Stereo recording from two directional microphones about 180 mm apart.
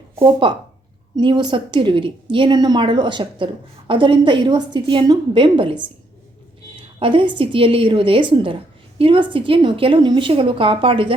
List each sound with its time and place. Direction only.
0.2 s a woman's voice: 25° right (ahead or behind)
7.0 s a woman's voice: 30° right (ahead or behind)